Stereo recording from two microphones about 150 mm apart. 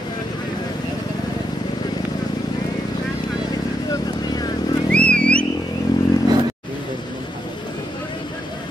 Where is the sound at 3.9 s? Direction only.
25° left (ahead or behind).